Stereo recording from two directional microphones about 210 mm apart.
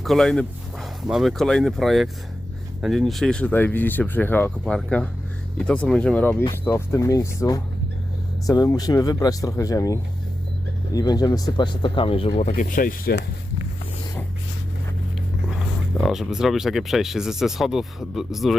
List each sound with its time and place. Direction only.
0.0 s speech: centre (ahead or behind); by 12.5 s 25° left (ahead or behind)
12.5 s speech: 40° left (ahead or behind)
16.0 s speech: centre (ahead or behind)